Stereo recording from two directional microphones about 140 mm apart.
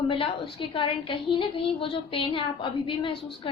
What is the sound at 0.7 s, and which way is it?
A woman's voice, 35° left (ahead or behind).